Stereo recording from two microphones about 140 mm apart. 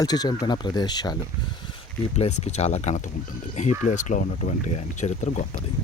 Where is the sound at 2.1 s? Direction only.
50° left (ahead or behind).